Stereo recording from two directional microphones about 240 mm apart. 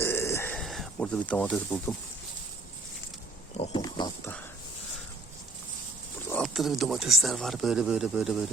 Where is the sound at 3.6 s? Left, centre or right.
Left.